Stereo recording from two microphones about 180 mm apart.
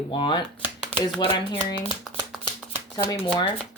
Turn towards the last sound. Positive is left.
turn(degrees=25)  # may be behind; listen again after turning